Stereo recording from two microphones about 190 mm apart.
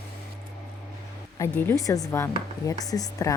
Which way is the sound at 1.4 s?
15° left (ahead or behind).